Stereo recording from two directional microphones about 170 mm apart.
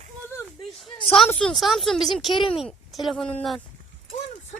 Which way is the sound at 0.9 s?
30° left (ahead or behind).